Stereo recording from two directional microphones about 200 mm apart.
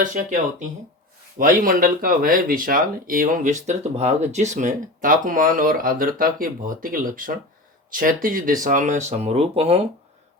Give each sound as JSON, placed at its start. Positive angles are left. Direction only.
{"t": 0.0, "sound": "speech", "side_deg": -40}